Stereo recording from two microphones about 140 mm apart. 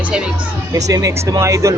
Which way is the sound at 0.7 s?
25° right (ahead or behind).